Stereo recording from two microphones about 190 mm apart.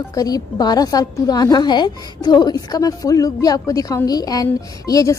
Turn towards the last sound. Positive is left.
turn(degrees=20)  # may be behind; listen again after turning